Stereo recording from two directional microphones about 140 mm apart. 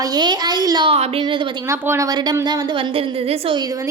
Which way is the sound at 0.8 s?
45° right (ahead or behind).